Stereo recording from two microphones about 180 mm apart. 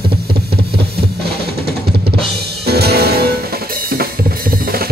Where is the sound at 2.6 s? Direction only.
65° right (ahead or behind).